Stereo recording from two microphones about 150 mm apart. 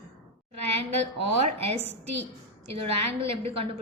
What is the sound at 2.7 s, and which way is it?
A woman's voice, 40° right (ahead or behind).